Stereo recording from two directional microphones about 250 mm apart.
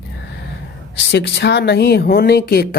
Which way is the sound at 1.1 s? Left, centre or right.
Left.